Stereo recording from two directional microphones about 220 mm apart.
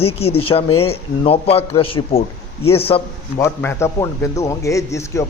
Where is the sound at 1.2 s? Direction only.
25° left (ahead or behind).